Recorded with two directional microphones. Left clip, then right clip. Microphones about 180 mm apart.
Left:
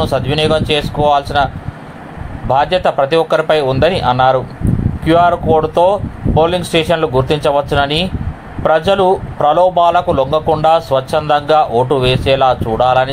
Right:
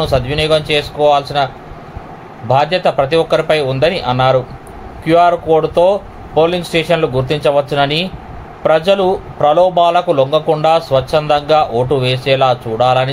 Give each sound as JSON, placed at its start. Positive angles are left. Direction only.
{"t": 0.0, "sound": "speech", "side_deg": 5}